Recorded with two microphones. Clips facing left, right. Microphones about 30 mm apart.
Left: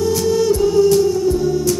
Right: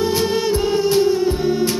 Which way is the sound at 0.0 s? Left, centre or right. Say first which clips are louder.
Left 2 dB; right.